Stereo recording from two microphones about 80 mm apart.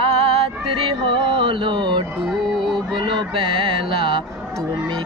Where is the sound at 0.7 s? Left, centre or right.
Right.